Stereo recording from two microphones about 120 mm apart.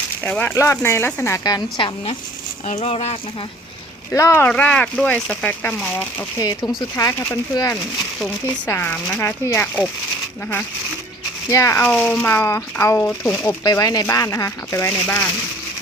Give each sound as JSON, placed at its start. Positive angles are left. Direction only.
{"t": 0.2, "sound": "speech", "side_deg": 15}
{"t": 2.6, "sound": "speech", "side_deg": 75}
{"t": 4.1, "sound": "speech", "side_deg": 25}
{"t": 4.4, "sound": "speech", "side_deg": 10}
{"t": 6.4, "sound": "speech", "side_deg": 25}
{"t": 11.4, "sound": "speech", "side_deg": 25}
{"t": 11.9, "sound": "speech", "side_deg": 5}
{"t": 12.2, "sound": "speech", "side_deg": 25}
{"t": 13.7, "sound": "speech", "side_deg": 30}